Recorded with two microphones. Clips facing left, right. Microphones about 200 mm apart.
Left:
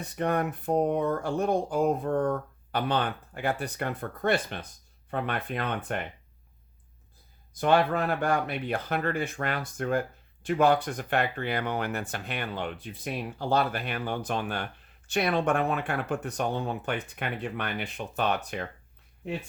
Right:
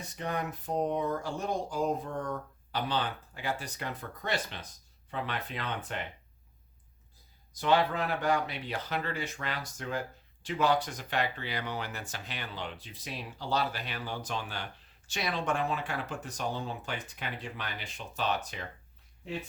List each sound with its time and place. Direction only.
0.0 s speech: 55° left (ahead or behind)
7.5 s speech: 55° left (ahead or behind)